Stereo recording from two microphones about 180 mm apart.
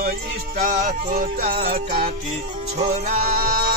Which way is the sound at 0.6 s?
50° right (ahead or behind).